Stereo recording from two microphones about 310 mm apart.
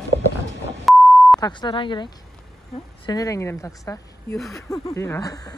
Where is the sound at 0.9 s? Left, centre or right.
Centre.